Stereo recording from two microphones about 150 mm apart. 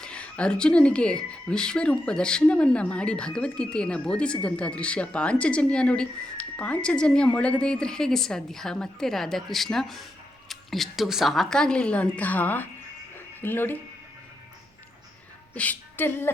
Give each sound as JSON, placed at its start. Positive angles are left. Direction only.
{"t": 0.0, "sound": "a woman's voice", "side_deg": 5}
{"t": 13.1, "sound": "music", "side_deg": 15}
{"t": 15.5, "sound": "a woman's voice", "side_deg": 10}